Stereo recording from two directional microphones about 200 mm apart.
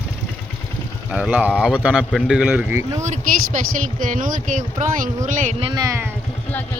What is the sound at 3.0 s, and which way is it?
Speech, 40° right (ahead or behind).